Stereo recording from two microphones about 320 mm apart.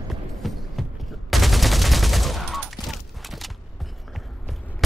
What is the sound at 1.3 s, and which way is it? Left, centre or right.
Fusillade, centre.